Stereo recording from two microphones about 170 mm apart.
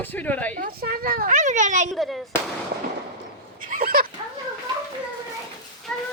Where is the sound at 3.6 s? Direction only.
55° right (ahead or behind).